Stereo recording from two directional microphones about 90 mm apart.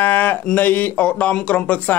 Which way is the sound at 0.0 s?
25° left (ahead or behind).